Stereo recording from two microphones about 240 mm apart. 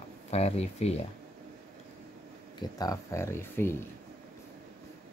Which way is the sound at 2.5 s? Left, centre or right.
Centre.